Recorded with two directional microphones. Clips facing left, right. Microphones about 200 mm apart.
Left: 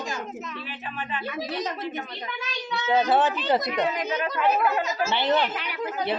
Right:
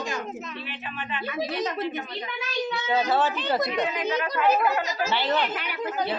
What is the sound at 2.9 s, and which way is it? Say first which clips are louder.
Speech: left 3 dB; 20° left (ahead or behind).